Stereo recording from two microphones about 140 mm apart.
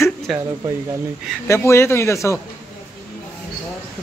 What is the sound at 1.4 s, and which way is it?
Speech, 20° left (ahead or behind).